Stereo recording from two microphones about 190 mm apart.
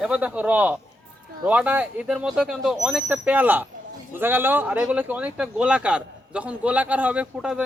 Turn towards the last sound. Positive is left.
turn(degrees=-5)  # may be behind; listen again after turning